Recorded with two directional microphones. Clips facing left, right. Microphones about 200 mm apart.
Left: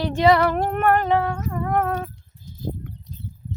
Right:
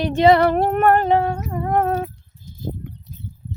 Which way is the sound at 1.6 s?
30° right (ahead or behind).